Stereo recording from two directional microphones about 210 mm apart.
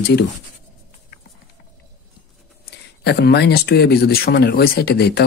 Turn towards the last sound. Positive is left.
turn(degrees=50)  # may be behind; listen again after turning